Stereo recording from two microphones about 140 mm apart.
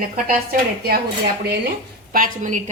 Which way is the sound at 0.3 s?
90° right.